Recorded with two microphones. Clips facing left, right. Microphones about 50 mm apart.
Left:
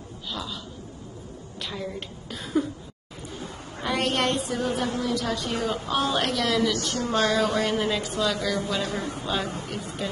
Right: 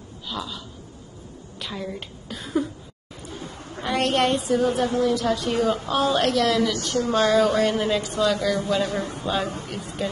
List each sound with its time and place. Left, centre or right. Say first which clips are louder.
0.3 s a woman's voice: right 2 dB; centre
1.6 s a woman's voice: right 1 dB; centre
3.8 s a woman's voice: right 3 dB; centre